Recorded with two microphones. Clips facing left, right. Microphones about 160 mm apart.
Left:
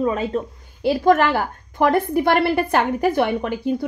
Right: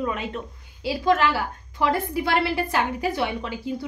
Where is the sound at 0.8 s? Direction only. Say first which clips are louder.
Left 5 dB; 55° left (ahead or behind).